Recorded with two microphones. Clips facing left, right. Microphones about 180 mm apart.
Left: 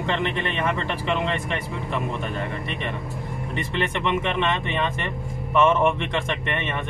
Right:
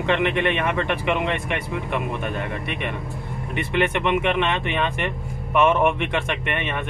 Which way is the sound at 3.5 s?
15° right (ahead or behind).